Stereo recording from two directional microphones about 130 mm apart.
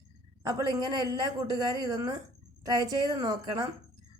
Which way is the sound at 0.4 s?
30° right (ahead or behind).